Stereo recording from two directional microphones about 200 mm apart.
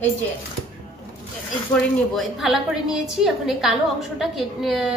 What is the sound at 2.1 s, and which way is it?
A woman's voice, centre (ahead or behind).